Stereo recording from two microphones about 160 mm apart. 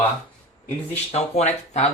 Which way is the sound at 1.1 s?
45° left (ahead or behind).